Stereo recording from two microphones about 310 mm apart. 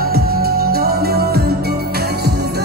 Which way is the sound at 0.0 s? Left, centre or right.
Right.